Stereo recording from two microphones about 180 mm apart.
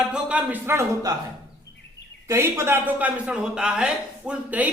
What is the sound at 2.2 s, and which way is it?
A man's voice, 15° right (ahead or behind).